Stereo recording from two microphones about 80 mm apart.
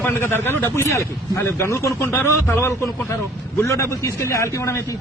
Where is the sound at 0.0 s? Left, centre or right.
Left.